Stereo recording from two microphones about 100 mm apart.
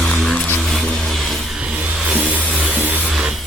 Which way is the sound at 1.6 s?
10° right (ahead or behind).